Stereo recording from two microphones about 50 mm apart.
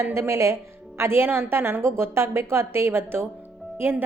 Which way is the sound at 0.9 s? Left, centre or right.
Right.